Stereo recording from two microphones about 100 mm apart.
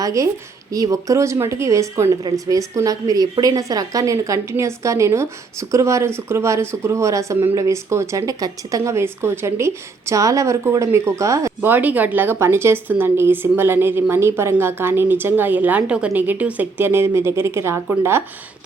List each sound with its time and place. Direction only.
0.0 s a woman's voice: 35° right (ahead or behind)